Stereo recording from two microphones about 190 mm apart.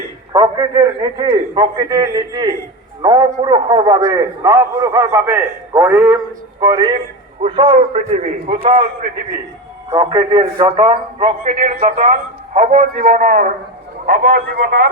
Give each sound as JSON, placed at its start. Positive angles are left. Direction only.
{"t": 0.3, "sound": "a man's voice", "side_deg": -20}
{"t": 6.6, "sound": "a man's voice", "side_deg": -20}
{"t": 10.0, "sound": "a man's voice", "side_deg": -25}
{"t": 11.4, "sound": "a man's voice", "side_deg": -45}